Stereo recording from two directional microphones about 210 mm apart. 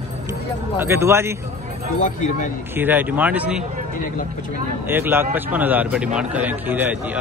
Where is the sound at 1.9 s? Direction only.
35° left (ahead or behind).